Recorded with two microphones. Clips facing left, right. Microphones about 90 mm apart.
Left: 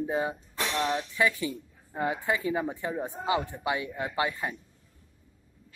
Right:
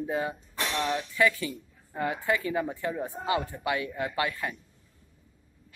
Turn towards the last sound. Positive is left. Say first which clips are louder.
# even
turn(degrees=20)  # may be behind; listen again after turning